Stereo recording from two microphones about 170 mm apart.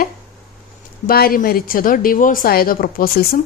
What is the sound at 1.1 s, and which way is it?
A woman's voice, 60° left (ahead or behind).